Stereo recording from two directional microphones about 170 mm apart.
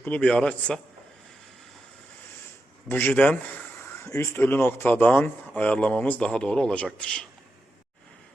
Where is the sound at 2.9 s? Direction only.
10° left (ahead or behind).